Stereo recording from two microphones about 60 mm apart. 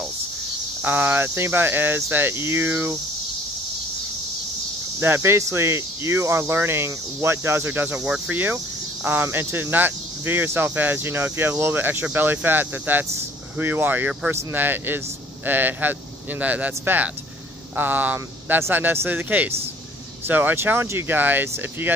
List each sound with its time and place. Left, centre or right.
0.8 s speech: right
5.0 s speech: right
6.9 s speech: right
7.9 s speech: centre
8.3 s speech: right
21.2 s speech: right